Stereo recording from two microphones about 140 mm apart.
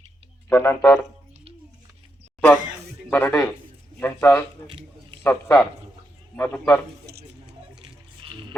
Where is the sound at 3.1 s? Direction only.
15° left (ahead or behind).